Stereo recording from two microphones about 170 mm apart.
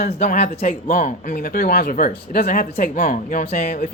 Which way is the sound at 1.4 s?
65° left (ahead or behind).